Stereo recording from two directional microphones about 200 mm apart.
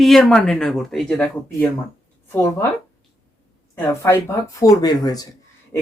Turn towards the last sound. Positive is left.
turn(degrees=20)  # may be behind; listen again after turning